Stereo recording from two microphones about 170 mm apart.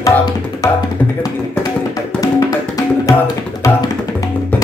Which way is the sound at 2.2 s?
20° left (ahead or behind).